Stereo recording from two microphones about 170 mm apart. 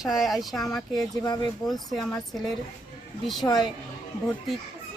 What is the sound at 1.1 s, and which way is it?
Speech, 25° left (ahead or behind).